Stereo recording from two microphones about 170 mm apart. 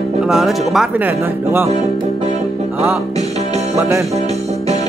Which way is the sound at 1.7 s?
40° right (ahead or behind).